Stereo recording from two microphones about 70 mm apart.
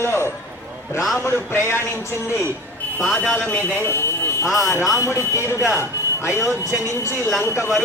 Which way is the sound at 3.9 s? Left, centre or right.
Left.